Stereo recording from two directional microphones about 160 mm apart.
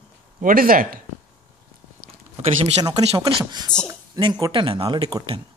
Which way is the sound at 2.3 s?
40° right (ahead or behind).